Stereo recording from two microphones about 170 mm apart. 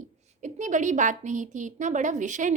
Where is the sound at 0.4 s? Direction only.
45° right (ahead or behind).